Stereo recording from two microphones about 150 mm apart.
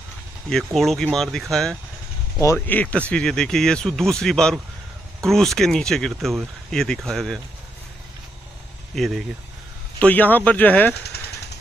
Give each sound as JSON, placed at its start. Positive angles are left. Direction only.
{"t": 0.7, "sound": "speech", "side_deg": 0}
{"t": 2.4, "sound": "speech", "side_deg": 15}
{"t": 8.9, "sound": "speech", "side_deg": 0}